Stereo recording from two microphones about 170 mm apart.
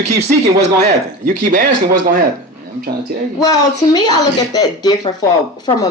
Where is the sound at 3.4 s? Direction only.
20° left (ahead or behind).